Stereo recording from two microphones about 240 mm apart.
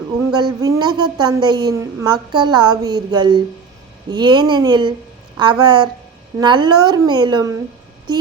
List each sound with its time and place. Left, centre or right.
0.3 s a woman's voice: centre